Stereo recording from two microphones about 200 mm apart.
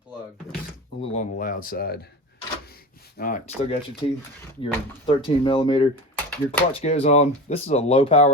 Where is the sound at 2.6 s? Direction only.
50° left (ahead or behind).